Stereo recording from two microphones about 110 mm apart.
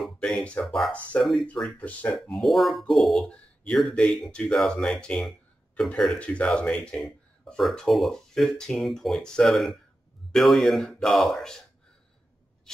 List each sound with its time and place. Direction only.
0.0 s speech: 5° left (ahead or behind)
1.1 s speech: 15° left (ahead or behind)
2.1 s speech: centre (ahead or behind)
7.0 s speech: centre (ahead or behind)